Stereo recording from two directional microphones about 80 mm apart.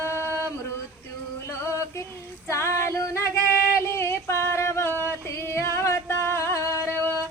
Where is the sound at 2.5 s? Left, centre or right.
Left.